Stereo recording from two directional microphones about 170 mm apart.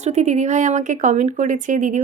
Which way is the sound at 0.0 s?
40° right (ahead or behind).